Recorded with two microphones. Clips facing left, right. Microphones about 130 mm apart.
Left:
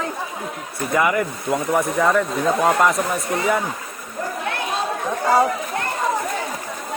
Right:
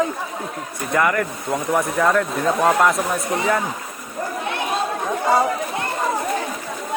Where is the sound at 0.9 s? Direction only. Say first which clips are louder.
Even; 10° left (ahead or behind).